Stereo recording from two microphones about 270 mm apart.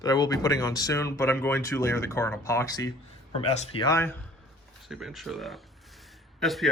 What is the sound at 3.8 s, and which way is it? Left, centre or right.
Speech, centre.